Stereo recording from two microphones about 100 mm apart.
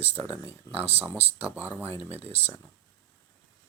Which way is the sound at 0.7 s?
75° right (ahead or behind).